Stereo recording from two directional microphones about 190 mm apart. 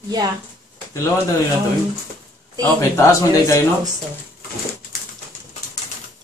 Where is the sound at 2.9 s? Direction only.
15° left (ahead or behind).